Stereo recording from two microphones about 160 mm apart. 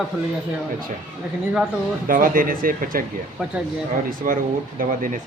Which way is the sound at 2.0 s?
60° right (ahead or behind).